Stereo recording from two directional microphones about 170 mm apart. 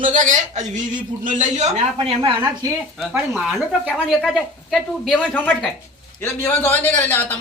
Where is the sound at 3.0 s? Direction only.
5° right (ahead or behind).